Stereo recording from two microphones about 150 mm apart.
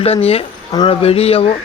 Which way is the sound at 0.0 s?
40° left (ahead or behind).